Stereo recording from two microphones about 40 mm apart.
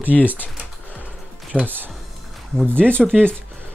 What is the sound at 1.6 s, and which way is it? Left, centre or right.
Speech, right.